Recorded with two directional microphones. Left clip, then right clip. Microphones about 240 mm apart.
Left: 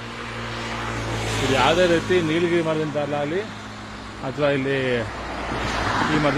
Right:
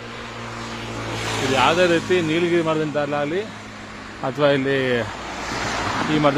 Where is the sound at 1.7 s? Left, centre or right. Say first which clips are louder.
Right 1 dB; right.